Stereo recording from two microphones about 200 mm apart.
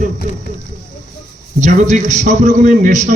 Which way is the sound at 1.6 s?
35° right (ahead or behind).